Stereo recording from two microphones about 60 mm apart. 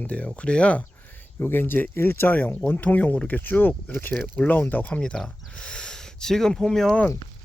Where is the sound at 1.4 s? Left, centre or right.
Left.